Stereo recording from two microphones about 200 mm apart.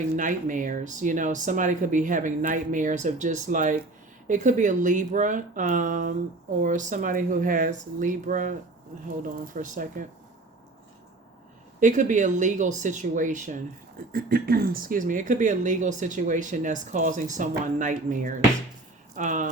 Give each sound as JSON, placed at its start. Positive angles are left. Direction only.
{"t": 0.2, "sound": "speech", "side_deg": -40}
{"t": 11.8, "sound": "speech", "side_deg": -40}